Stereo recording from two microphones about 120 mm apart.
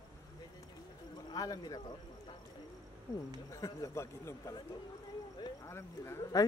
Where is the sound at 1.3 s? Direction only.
30° left (ahead or behind).